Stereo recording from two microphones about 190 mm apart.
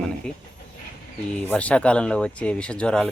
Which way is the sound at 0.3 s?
5° left (ahead or behind).